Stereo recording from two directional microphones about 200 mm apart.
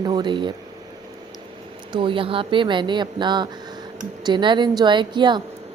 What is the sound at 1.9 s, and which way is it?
Speech, 25° right (ahead or behind).